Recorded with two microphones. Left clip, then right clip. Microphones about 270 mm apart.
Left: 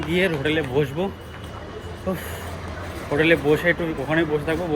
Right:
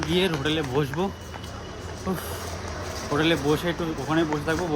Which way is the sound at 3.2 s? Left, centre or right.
Centre.